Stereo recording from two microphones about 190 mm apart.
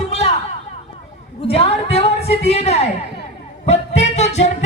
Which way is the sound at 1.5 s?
30° left (ahead or behind).